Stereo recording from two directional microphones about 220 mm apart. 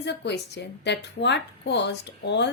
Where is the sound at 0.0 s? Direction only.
50° left (ahead or behind).